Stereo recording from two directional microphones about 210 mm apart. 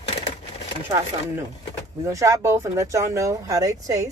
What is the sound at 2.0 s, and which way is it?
Speech, 15° right (ahead or behind).